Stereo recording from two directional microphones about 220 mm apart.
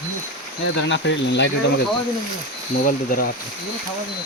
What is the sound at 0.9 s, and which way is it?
Speech, 55° left (ahead or behind).